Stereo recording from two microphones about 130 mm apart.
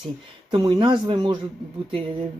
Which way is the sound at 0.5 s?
40° right (ahead or behind).